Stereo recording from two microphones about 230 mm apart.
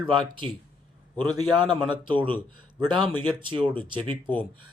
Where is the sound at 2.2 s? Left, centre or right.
Right.